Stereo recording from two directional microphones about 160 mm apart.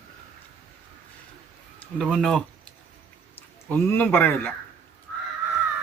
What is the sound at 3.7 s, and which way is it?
Speech, 10° left (ahead or behind).